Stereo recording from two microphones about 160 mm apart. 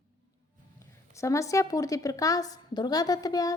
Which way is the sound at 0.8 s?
20° left (ahead or behind).